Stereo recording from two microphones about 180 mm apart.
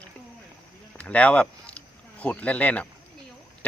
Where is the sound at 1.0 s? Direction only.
5° left (ahead or behind).